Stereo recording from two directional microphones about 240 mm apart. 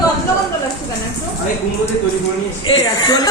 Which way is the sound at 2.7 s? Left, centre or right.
Centre.